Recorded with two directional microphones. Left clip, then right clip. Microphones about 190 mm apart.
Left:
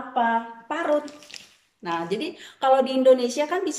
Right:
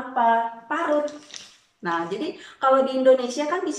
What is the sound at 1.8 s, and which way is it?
A woman's voice, 15° left (ahead or behind).